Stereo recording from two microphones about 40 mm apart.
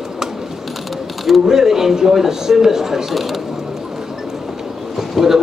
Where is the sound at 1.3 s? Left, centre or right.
Centre.